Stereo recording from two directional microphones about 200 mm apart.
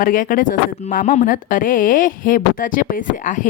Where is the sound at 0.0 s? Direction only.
40° left (ahead or behind).